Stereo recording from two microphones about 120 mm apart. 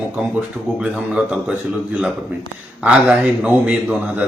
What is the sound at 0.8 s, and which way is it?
Speech, 10° right (ahead or behind).